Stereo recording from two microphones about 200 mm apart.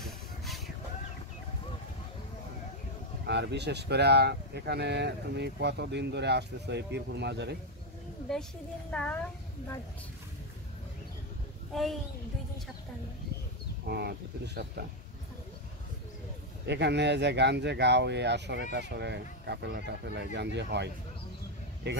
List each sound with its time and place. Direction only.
3.3 s speech: 60° right (ahead or behind)
8.3 s a woman's voice: centre (ahead or behind)
11.7 s a woman's voice: centre (ahead or behind)
13.8 s speech: 55° right (ahead or behind)
16.6 s speech: 60° right (ahead or behind)